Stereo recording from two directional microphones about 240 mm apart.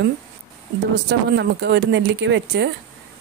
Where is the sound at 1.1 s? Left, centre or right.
Right.